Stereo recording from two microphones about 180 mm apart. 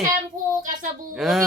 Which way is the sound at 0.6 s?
45° right (ahead or behind).